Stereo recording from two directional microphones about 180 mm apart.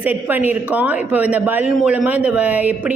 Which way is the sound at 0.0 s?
10° right (ahead or behind).